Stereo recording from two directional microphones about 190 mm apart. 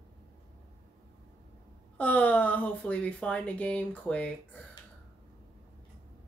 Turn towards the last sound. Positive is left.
turn(degrees=5)  # may be behind; listen again after turning